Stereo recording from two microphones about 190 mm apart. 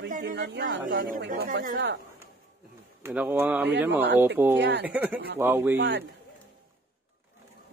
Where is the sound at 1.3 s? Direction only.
45° right (ahead or behind).